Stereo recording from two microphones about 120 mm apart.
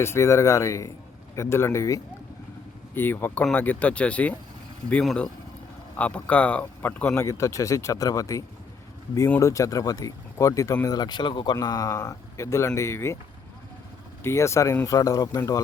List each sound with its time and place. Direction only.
0.0 s speech: 20° left (ahead or behind)
14.3 s speech: 25° left (ahead or behind)